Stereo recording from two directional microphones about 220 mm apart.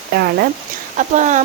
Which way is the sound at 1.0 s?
35° right (ahead or behind).